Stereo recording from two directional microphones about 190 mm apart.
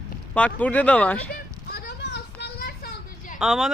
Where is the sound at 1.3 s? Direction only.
55° left (ahead or behind).